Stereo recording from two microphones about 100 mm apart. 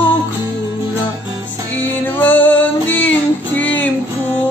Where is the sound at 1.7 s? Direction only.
20° left (ahead or behind).